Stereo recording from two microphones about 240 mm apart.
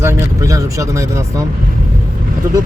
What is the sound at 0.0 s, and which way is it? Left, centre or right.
Speech, centre.